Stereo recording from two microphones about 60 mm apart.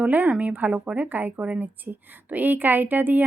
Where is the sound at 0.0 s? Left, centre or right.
Right.